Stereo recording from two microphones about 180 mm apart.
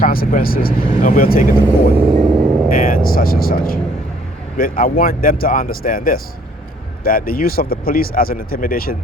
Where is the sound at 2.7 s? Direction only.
50° left (ahead or behind).